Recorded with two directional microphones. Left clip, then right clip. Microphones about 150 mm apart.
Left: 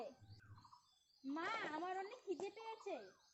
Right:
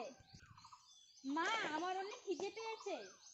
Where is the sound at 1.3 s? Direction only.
20° left (ahead or behind).